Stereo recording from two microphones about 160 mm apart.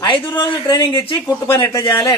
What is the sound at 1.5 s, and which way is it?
Speech, 15° left (ahead or behind).